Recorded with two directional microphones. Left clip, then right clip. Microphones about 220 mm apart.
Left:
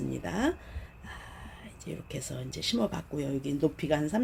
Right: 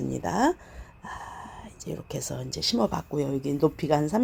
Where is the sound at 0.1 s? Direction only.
15° right (ahead or behind).